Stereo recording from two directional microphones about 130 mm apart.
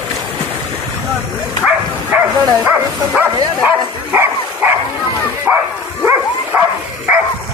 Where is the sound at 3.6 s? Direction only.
15° right (ahead or behind).